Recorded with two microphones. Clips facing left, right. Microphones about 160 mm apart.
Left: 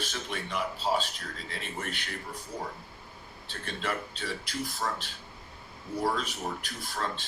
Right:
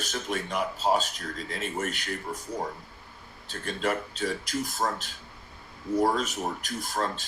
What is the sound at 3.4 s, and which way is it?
Speech, 40° right (ahead or behind).